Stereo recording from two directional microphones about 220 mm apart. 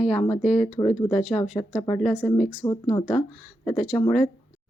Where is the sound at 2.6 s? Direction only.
20° left (ahead or behind).